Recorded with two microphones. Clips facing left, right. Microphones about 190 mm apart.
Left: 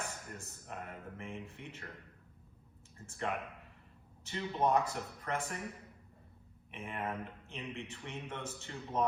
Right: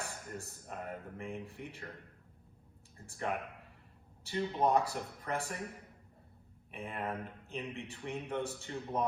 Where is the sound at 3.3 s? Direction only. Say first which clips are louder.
Right 2 dB; 45° right (ahead or behind).